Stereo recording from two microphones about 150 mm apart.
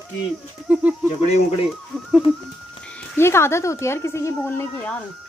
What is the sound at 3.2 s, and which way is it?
Speech, 15° left (ahead or behind).